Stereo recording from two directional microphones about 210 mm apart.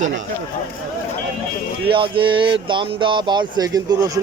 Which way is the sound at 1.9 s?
25° right (ahead or behind).